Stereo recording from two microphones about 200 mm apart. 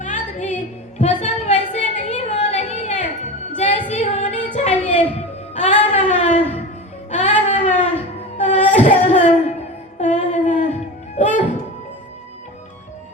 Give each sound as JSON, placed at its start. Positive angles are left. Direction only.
{"t": 0.0, "sound": "music", "side_deg": 40}
{"t": 0.5, "sound": "a sound", "side_deg": 35}
{"t": 3.6, "sound": "music", "side_deg": 35}
{"t": 3.9, "sound": "female singing", "side_deg": 35}
{"t": 5.5, "sound": "music", "side_deg": 35}
{"t": 6.1, "sound": "a sound", "side_deg": 35}
{"t": 10.0, "sound": "music", "side_deg": 40}